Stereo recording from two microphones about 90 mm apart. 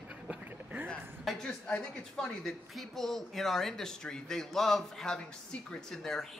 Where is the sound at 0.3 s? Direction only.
15° right (ahead or behind).